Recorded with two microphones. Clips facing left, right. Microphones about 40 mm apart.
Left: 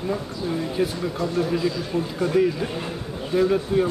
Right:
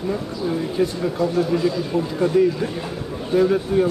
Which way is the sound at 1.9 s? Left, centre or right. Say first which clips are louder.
Right 3 dB; left.